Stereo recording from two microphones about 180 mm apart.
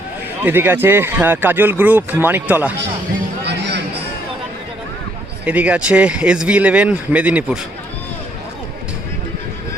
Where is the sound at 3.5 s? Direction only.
70° right (ahead or behind).